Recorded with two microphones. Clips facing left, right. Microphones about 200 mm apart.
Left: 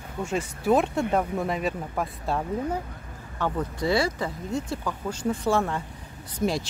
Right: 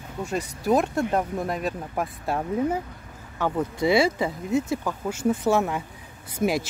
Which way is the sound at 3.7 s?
20° right (ahead or behind).